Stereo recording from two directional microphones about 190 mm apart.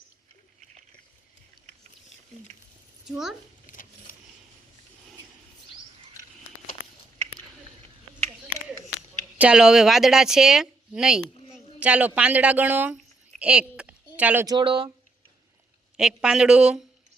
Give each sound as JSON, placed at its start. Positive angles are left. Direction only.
{"t": 3.1, "sound": "speech", "side_deg": 0}
{"t": 3.7, "sound": "a sound", "side_deg": 45}
{"t": 9.4, "sound": "speech", "side_deg": -5}
{"t": 14.4, "sound": "speech", "side_deg": -25}
{"t": 16.0, "sound": "speech", "side_deg": -5}